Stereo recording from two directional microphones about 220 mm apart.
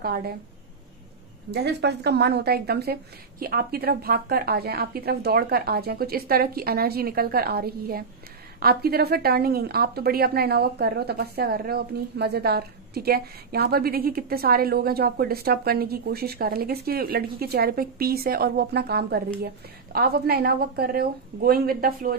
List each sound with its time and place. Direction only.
0.0 s a woman's voice: 45° right (ahead or behind)
1.5 s a woman's voice: 50° right (ahead or behind)